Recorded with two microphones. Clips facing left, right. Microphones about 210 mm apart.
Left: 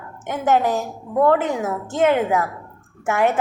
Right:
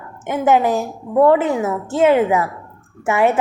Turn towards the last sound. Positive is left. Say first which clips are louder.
# right 3 dB
turn(degrees=-10)  # may be behind; listen again after turning